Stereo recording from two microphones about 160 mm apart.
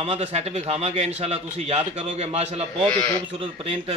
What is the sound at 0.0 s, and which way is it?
A man's voice, 40° right (ahead or behind).